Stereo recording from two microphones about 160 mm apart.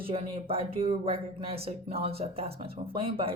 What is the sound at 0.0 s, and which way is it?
Speech, 35° right (ahead or behind).